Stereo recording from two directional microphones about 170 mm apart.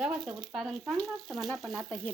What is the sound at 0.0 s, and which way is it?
A woman's voice, 5° right (ahead or behind).